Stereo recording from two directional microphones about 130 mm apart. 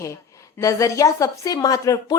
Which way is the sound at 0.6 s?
25° left (ahead or behind).